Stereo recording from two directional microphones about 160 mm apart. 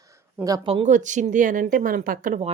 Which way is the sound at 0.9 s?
50° right (ahead or behind).